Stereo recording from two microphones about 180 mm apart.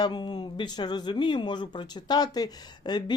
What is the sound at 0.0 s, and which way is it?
Speech, 25° left (ahead or behind).